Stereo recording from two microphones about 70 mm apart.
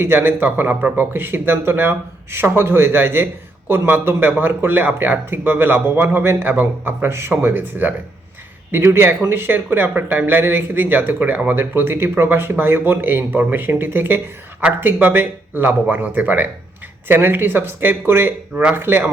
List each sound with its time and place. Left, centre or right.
0.0 s speech: right